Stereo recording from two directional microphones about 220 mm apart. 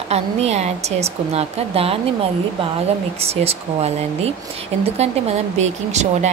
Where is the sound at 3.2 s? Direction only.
25° right (ahead or behind).